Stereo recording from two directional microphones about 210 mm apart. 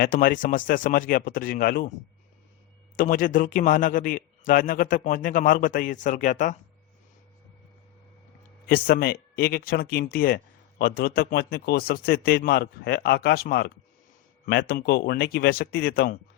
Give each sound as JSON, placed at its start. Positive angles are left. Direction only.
{"t": 0.0, "sound": "a man's voice", "side_deg": 40}
{"t": 2.9, "sound": "a man's voice", "side_deg": 40}
{"t": 8.6, "sound": "speech", "side_deg": 45}